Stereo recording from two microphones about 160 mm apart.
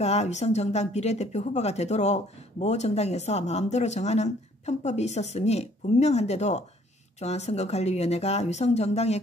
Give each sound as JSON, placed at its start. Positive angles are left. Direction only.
{"t": 0.0, "sound": "speech", "side_deg": 45}